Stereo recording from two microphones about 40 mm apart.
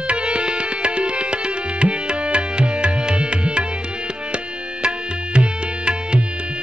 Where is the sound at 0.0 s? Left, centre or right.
Right.